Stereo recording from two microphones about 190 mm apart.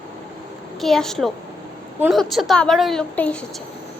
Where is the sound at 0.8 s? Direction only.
Centre (ahead or behind).